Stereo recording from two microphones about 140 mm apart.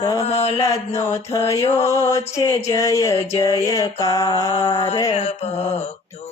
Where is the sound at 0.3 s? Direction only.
45° left (ahead or behind).